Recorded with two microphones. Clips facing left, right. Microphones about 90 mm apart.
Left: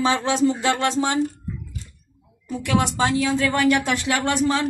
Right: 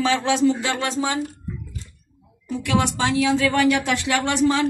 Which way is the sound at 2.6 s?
40° left (ahead or behind).